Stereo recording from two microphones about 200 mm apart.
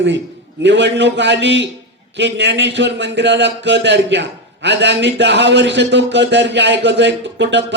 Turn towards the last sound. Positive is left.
turn(degrees=-60)  # may be behind; listen again after turning